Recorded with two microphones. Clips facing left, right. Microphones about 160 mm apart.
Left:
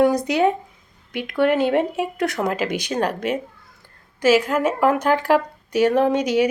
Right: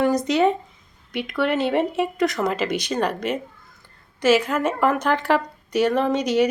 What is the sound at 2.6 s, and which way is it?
Speech, 55° left (ahead or behind).